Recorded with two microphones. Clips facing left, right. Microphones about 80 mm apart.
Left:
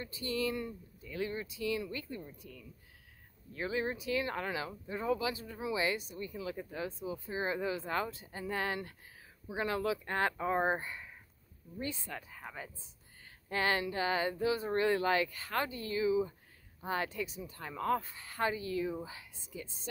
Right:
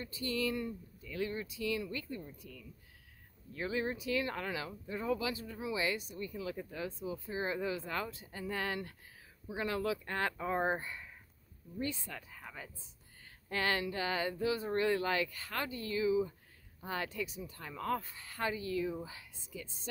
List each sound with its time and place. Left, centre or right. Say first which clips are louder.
0.0 s speech: left 1 dB; left